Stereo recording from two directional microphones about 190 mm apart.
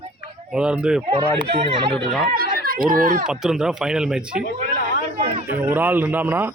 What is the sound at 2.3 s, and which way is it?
Speech, 50° right (ahead or behind).